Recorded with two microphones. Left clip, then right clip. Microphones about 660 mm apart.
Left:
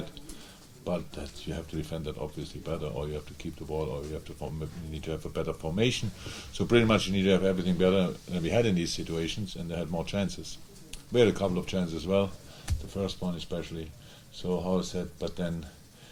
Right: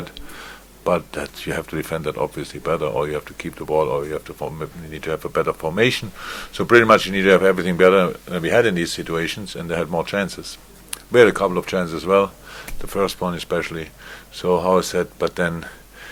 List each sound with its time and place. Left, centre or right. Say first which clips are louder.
0.9 s speech: right 14 dB; right
2.6 s speech: right 15 dB; right
4.3 s speech: right 11 dB; right